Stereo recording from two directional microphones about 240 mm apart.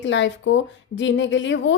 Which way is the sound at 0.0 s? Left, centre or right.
Left.